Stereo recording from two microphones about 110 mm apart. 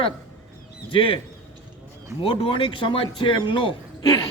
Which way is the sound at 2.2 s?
55° left (ahead or behind).